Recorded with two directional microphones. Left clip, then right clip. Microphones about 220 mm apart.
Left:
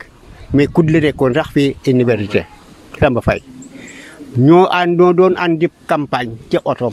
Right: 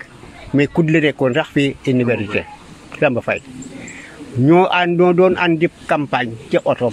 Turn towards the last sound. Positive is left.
turn(degrees=50)  # may be behind; listen again after turning